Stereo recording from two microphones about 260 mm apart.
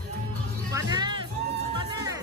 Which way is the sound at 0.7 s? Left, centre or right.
Centre.